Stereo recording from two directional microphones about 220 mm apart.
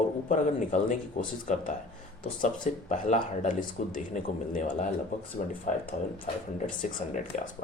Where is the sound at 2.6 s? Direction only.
35° left (ahead or behind).